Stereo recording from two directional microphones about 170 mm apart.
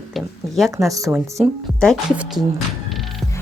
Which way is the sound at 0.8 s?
20° right (ahead or behind).